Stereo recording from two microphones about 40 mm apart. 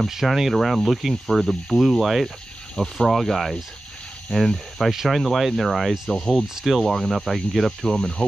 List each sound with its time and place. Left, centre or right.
0.1 s speech: centre
1.8 s speech: centre
2.7 s speech: centre
3.1 s speech: centre
6.5 s speech: centre